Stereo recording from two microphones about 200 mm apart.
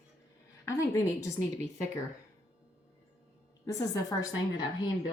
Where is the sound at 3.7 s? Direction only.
15° left (ahead or behind).